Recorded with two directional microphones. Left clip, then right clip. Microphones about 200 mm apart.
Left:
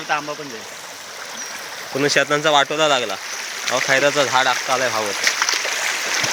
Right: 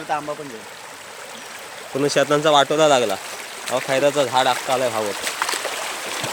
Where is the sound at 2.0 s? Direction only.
15° right (ahead or behind).